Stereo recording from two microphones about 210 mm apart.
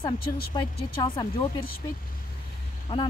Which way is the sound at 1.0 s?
20° left (ahead or behind).